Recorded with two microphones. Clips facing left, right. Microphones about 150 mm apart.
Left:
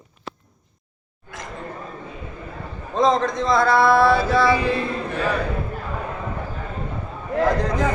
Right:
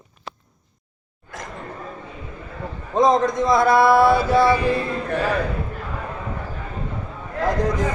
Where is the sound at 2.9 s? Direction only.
15° right (ahead or behind).